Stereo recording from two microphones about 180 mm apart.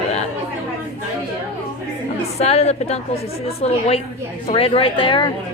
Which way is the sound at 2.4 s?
35° left (ahead or behind).